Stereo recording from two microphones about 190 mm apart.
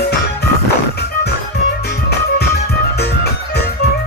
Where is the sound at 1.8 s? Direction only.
60° left (ahead or behind).